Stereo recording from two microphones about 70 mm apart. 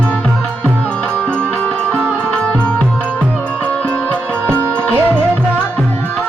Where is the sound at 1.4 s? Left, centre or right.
Centre.